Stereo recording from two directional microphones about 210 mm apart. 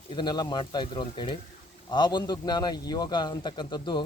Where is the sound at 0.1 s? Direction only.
20° left (ahead or behind).